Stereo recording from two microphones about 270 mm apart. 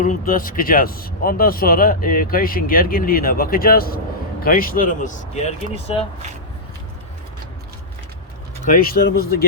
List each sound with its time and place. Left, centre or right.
0.0 s speech: left
8.6 s speech: left